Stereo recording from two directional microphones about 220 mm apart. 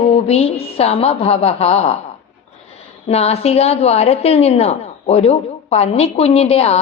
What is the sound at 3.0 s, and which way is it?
Speech, 30° left (ahead or behind).